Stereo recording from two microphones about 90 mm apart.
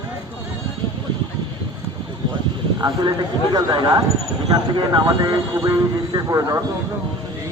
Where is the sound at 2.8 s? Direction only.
50° right (ahead or behind).